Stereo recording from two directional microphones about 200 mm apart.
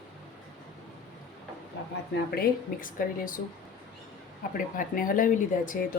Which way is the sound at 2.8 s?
45° left (ahead or behind).